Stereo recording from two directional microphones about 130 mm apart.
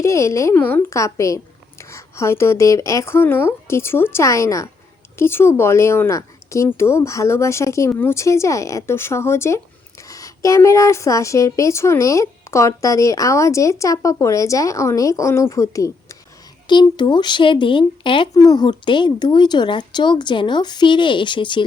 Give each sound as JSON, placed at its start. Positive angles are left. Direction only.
{"t": 0.0, "sound": "speech", "side_deg": 25}
{"t": 16.6, "sound": "speech", "side_deg": 35}